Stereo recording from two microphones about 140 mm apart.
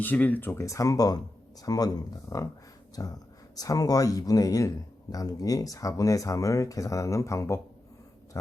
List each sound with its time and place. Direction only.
0.0 s speech: 10° left (ahead or behind)